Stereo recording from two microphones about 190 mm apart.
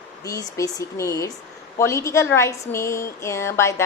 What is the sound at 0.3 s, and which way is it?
A woman's voice, 20° left (ahead or behind).